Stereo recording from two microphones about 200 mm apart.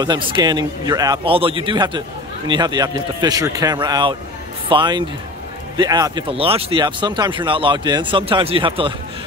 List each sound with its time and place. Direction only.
0.0 s a man's voice: 25° right (ahead or behind)